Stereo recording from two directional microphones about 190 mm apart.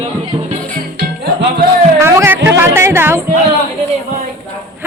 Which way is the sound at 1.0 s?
60° right (ahead or behind).